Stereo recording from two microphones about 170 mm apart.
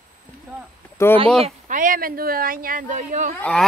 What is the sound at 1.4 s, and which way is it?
Speech, 50° right (ahead or behind).